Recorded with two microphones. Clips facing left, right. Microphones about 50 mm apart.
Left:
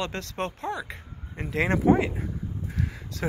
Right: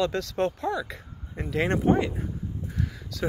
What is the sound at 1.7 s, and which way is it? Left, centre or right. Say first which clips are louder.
Speech: left 2 dB; left.